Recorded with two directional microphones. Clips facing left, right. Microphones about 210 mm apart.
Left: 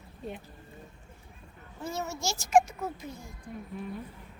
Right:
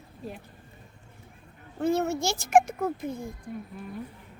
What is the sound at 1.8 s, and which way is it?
Speech, 60° right (ahead or behind).